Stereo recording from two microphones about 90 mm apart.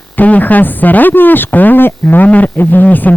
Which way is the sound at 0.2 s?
20° left (ahead or behind).